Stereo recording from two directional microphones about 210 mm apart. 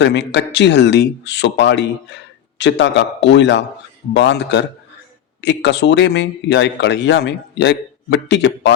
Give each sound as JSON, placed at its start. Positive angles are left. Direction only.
{"t": 0.0, "sound": "speech", "side_deg": 55}